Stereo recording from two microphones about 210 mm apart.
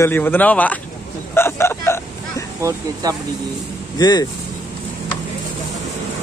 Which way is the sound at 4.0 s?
20° left (ahead or behind).